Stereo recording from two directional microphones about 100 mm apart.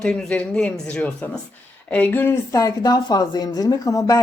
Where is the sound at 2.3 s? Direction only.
30° left (ahead or behind).